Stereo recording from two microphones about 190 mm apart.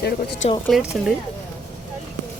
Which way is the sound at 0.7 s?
5° right (ahead or behind).